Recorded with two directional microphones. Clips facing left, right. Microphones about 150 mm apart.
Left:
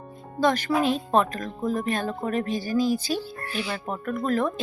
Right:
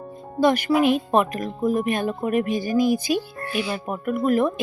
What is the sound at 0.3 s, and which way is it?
Speech, 10° right (ahead or behind).